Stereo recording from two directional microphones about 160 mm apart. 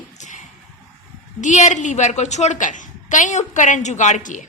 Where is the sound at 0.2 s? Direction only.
50° left (ahead or behind).